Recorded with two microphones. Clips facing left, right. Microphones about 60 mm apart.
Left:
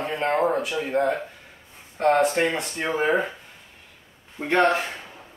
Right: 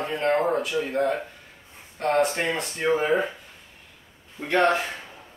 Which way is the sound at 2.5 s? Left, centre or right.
Centre.